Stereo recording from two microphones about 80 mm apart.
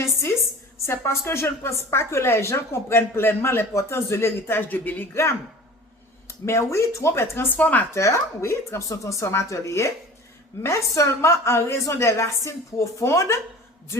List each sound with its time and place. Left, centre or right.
0.0 s a sound: left
0.9 s a woman's voice: left
6.2 s a woman's voice: left
7.9 s a woman's voice: left